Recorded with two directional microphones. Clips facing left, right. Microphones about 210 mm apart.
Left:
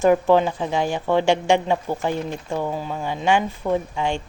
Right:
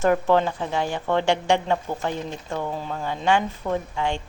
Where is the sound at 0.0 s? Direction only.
15° left (ahead or behind).